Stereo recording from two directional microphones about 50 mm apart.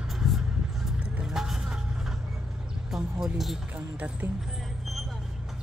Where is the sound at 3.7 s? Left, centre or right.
Right.